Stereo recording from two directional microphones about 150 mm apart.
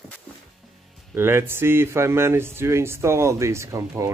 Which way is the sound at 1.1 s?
15° right (ahead or behind).